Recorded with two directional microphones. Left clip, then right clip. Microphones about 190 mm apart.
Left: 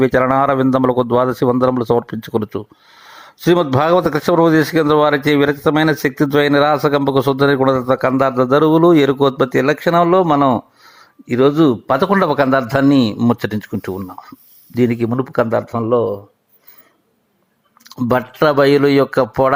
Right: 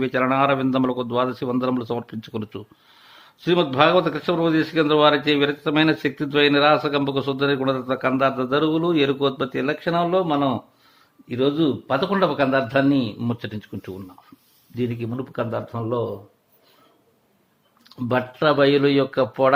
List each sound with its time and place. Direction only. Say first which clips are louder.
0.2 s a man's voice: left 6 dB; 35° left (ahead or behind)
17.8 s speech: left 6 dB; 35° left (ahead or behind)